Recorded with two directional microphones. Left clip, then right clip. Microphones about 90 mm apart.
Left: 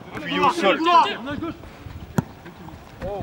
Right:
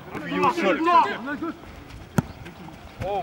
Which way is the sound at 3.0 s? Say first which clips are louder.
Right 2 dB; 20° right (ahead or behind).